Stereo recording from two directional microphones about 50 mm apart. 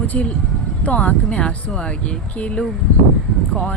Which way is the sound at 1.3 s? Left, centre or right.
Left.